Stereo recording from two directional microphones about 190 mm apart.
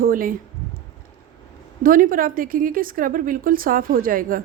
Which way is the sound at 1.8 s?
45° right (ahead or behind).